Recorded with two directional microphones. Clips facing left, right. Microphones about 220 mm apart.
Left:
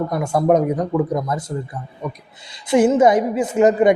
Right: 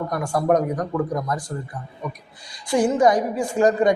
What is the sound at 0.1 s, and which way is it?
A woman's voice, 25° left (ahead or behind).